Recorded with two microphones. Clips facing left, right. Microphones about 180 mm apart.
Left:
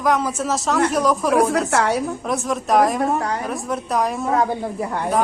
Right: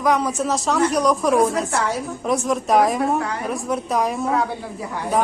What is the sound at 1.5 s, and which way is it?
Speech, 75° left (ahead or behind).